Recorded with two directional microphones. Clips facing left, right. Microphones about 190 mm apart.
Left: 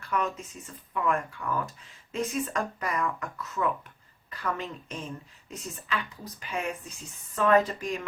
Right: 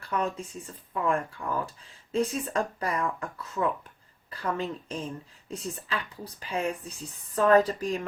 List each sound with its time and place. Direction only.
0.1 s speech: 30° right (ahead or behind)